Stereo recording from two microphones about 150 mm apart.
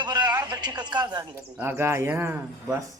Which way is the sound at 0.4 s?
30° right (ahead or behind).